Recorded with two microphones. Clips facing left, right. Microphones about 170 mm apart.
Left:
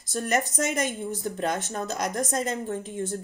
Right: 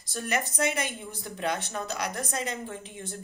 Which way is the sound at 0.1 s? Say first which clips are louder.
Left 4 dB; 45° left (ahead or behind).